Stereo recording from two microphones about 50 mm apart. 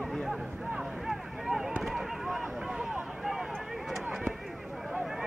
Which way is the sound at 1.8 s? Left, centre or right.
Centre.